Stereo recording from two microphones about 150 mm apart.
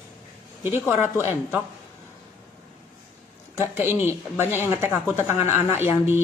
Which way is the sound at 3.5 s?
15° right (ahead or behind).